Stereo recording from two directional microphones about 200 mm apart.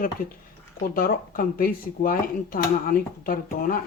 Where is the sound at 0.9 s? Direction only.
45° left (ahead or behind).